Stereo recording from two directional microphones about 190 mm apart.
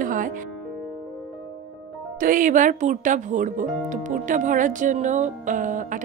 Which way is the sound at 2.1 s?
45° right (ahead or behind).